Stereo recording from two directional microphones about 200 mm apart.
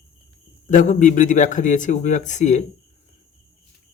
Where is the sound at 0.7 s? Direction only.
40° left (ahead or behind).